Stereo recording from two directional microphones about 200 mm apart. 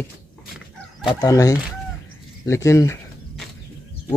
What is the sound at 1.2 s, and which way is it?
Speech, 15° left (ahead or behind).